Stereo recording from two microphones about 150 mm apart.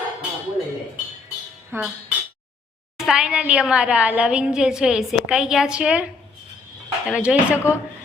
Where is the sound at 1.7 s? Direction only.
15° right (ahead or behind).